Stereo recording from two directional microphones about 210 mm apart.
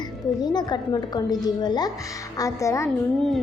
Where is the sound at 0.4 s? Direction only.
20° left (ahead or behind).